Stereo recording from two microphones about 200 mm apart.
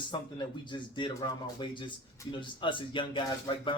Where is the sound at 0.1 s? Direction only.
20° left (ahead or behind).